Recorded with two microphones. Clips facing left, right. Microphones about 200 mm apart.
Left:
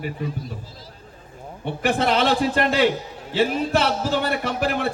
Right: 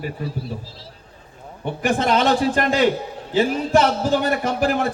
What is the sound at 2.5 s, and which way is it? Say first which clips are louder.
Speech: right 1 dB; 45° right (ahead or behind).